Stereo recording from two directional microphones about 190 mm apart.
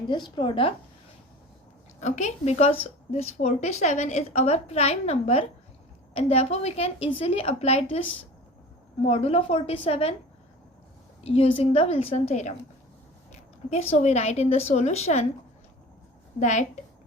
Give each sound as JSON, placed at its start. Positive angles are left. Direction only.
{"t": 0.1, "sound": "a woman's voice", "side_deg": 25}
{"t": 2.0, "sound": "a woman's voice", "side_deg": 35}
{"t": 9.0, "sound": "a woman's voice", "side_deg": 30}
{"t": 11.2, "sound": "a woman's voice", "side_deg": 30}
{"t": 13.9, "sound": "a woman's voice", "side_deg": 35}
{"t": 16.4, "sound": "a woman's voice", "side_deg": 40}